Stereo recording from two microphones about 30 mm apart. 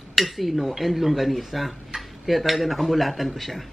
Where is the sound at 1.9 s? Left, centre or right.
Right.